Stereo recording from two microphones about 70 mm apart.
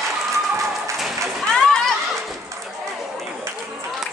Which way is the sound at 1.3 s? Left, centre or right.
Centre.